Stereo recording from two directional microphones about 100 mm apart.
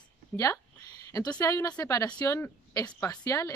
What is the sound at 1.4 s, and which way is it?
A woman's voice, 35° left (ahead or behind).